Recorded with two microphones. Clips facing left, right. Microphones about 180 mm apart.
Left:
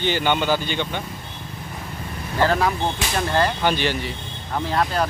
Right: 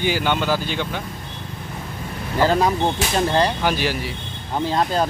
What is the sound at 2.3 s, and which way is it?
Speech, 20° right (ahead or behind).